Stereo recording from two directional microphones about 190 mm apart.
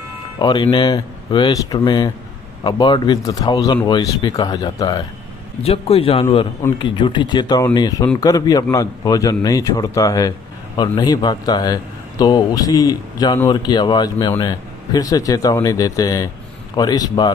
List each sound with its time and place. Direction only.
0.4 s a man's voice: 25° left (ahead or behind)